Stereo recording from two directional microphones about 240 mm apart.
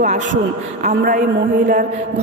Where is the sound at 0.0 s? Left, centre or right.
Right.